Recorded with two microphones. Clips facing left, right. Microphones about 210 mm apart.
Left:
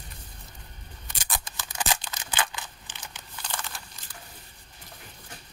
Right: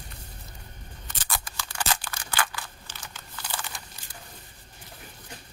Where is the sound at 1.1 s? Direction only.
15° left (ahead or behind).